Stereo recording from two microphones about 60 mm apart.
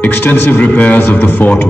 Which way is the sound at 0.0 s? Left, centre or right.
Left.